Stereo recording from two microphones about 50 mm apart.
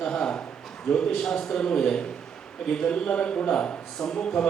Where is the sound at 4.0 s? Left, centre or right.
Centre.